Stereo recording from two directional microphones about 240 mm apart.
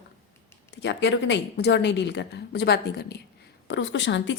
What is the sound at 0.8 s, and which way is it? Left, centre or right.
Speech, left.